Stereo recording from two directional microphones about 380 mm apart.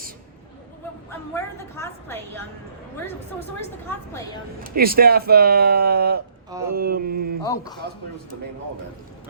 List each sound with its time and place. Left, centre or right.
1.3 s a woman's voice: centre
4.1 s a man's voice: centre
4.6 s speech: right
7.4 s a man's voice: centre